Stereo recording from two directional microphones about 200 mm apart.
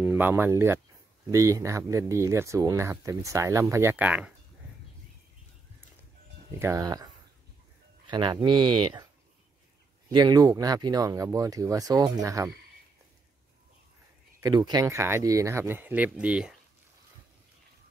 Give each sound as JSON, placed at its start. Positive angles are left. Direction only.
{"t": 0.0, "sound": "speech", "side_deg": -10}
{"t": 6.6, "sound": "speech", "side_deg": -15}
{"t": 8.1, "sound": "speech", "side_deg": -20}
{"t": 14.4, "sound": "speech", "side_deg": -20}